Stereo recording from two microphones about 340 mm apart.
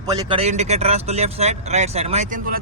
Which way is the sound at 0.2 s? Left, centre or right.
Centre.